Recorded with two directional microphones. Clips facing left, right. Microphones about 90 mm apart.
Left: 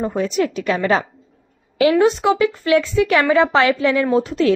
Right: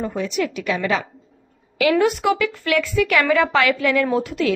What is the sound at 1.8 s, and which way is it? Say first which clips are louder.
A woman's voice: left 3 dB; 25° left (ahead or behind).